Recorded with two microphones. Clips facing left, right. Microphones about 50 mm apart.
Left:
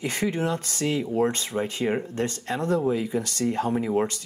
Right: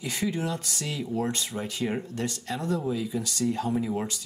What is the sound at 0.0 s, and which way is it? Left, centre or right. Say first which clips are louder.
Speech: left 4 dB; left.